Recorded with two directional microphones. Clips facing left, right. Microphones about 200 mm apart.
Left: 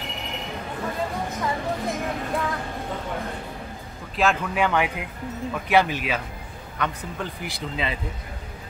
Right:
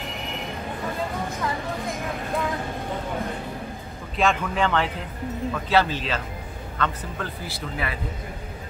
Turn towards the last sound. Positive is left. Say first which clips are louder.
# left 1 dB
turn(degrees=20)  # may be behind; listen again after turning